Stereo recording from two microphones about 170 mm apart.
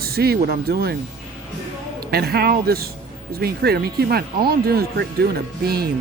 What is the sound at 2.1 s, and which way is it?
Speech, 65° right (ahead or behind).